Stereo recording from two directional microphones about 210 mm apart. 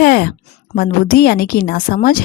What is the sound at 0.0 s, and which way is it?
A woman's voice, 45° left (ahead or behind).